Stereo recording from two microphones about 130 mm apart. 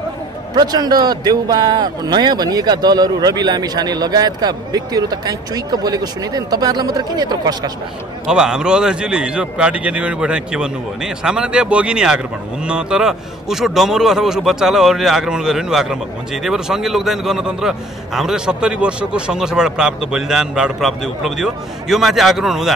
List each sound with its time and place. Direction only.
0.6 s a man's voice: 30° right (ahead or behind)
8.3 s a man's voice: 5° right (ahead or behind)